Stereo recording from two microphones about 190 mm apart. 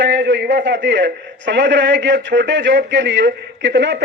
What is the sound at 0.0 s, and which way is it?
A man's voice, 65° right (ahead or behind).